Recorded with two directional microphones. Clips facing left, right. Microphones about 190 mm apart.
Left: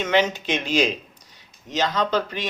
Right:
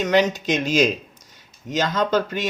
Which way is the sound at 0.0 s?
40° right (ahead or behind).